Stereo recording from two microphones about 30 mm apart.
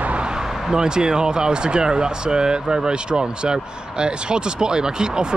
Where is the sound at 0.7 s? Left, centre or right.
Right.